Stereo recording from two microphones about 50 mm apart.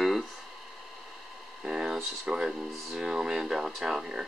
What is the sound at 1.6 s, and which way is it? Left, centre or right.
Speech, centre.